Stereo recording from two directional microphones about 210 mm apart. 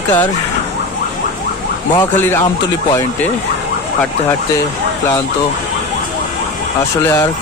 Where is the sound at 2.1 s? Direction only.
10° left (ahead or behind).